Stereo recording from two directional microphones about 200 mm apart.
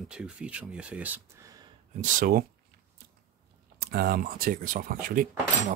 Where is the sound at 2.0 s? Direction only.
45° right (ahead or behind).